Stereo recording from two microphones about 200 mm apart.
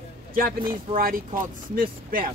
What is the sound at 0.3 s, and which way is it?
Speech, 45° right (ahead or behind).